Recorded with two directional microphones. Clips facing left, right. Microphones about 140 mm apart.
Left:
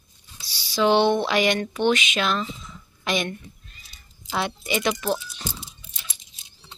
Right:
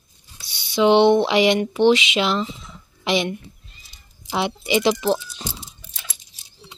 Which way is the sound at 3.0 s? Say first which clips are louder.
Right 4 dB; 20° right (ahead or behind).